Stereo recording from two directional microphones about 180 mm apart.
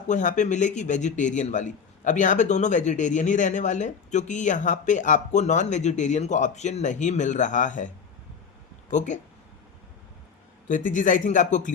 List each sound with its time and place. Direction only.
0.1 s a man's voice: 45° left (ahead or behind)
10.7 s a man's voice: 45° left (ahead or behind)